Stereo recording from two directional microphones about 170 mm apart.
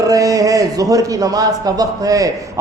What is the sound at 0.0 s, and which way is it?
A man's voice, 20° right (ahead or behind).